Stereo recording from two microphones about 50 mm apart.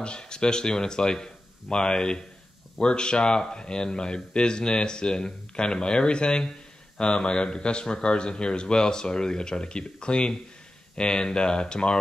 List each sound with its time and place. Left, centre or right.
0.0 s speech: centre